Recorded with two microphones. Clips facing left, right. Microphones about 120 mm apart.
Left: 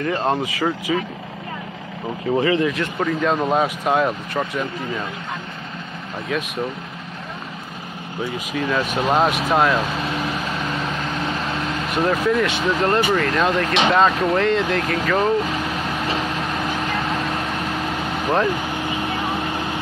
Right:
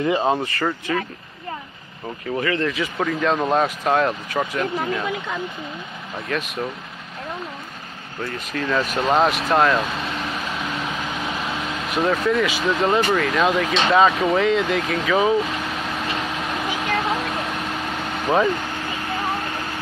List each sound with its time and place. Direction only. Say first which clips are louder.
0.0 s speech: right 2 dB; 15° right (ahead or behind)
0.3 s speech: left 1 dB; 5° left (ahead or behind)
2.3 s speech: left 5 dB; 25° left (ahead or behind)
2.6 s speech: left 2 dB; centre (ahead or behind)
6.2 s speech: left 2 dB; centre (ahead or behind)
8.2 s speech: left 2 dB; 10° left (ahead or behind)
16.3 s vehicle: left 2 dB; centre (ahead or behind)